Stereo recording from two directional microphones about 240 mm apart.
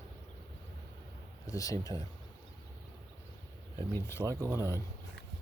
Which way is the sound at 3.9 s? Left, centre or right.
Centre.